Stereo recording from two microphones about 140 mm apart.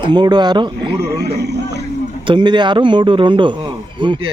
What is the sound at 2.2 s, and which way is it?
A man's voice, 35° right (ahead or behind).